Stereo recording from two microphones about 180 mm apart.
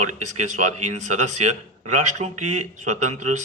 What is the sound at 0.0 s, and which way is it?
A man's voice, 40° right (ahead or behind).